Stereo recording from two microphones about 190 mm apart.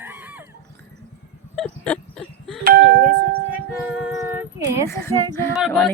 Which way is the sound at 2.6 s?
55° right (ahead or behind).